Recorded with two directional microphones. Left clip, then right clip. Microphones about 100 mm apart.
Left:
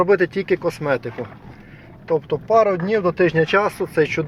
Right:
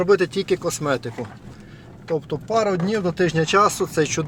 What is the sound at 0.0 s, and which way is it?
Speech, 5° right (ahead or behind).